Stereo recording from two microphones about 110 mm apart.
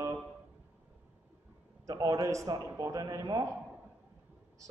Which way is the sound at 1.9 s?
35° right (ahead or behind).